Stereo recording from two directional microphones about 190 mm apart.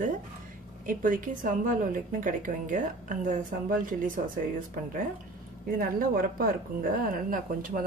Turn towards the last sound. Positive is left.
turn(degrees=-45)  # may be behind; listen again after turning